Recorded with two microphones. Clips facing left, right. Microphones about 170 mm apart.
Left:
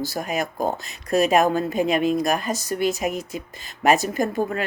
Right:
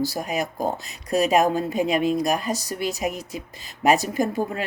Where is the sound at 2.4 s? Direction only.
35° right (ahead or behind).